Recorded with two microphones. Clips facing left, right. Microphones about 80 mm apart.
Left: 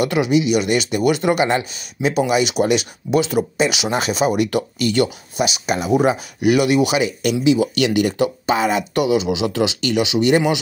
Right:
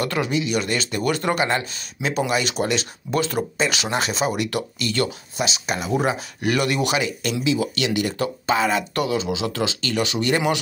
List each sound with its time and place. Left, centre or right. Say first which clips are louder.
0.0 s speech: left 6 dB; centre
7.4 s speech: left 6 dB; left